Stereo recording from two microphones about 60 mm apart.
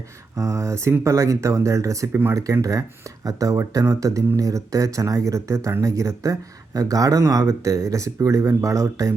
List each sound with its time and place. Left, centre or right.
0.3 s speech: right
6.7 s speech: right